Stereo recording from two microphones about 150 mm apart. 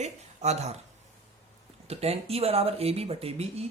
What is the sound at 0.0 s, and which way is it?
Speech, 50° right (ahead or behind).